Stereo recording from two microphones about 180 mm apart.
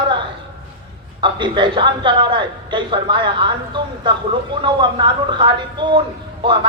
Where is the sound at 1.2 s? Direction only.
25° right (ahead or behind).